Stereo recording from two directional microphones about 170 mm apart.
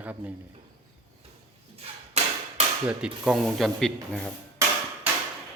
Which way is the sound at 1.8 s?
35° right (ahead or behind).